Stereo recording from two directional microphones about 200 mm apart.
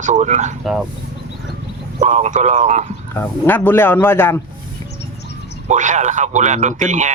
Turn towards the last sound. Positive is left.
turn(degrees=-35)  # may be behind; listen again after turning